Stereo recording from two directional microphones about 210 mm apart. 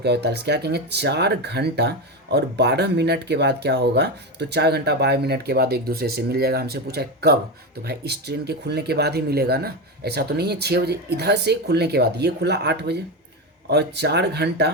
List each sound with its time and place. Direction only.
0.0 s speech: 50° right (ahead or behind)